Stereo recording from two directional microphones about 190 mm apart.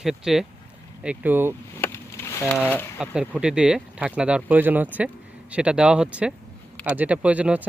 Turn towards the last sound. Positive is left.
turn(degrees=-5)  # may be behind; listen again after turning